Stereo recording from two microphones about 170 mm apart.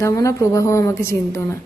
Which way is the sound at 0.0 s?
15° left (ahead or behind).